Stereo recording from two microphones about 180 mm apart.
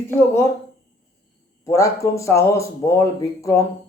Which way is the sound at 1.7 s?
15° left (ahead or behind).